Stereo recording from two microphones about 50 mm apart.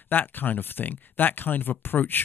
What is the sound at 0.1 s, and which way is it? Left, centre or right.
Speech, left.